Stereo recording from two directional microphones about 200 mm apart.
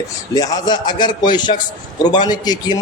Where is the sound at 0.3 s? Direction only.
20° left (ahead or behind).